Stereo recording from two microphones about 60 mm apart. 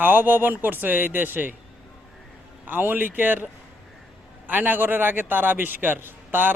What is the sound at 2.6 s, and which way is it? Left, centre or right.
A man's voice, right.